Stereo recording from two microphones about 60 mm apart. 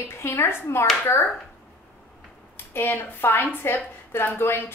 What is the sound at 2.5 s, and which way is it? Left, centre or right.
A woman's voice, left.